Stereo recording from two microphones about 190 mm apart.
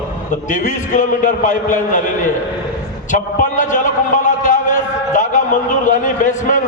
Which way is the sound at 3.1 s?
40° left (ahead or behind).